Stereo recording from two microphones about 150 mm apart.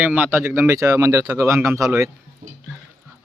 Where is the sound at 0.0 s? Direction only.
10° right (ahead or behind).